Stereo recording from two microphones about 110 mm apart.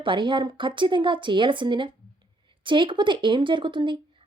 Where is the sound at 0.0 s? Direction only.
50° right (ahead or behind).